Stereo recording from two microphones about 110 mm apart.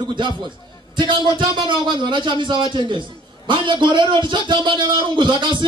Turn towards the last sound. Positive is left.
turn(degrees=-45)  # may be behind; listen again after turning